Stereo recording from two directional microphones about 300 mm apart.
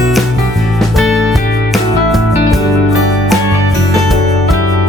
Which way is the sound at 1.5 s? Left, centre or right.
Left.